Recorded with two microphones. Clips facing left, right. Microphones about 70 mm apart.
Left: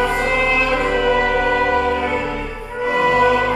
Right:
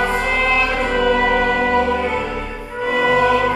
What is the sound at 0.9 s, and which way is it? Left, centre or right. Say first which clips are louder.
Music: right 2 dB; centre.